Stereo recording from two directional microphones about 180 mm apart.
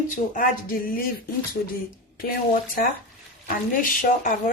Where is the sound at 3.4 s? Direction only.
50° left (ahead or behind).